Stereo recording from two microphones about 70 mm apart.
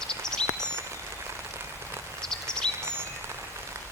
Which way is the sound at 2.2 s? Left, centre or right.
Centre.